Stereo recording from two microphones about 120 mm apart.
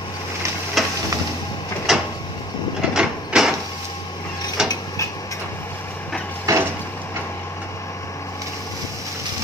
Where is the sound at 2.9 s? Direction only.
5° right (ahead or behind).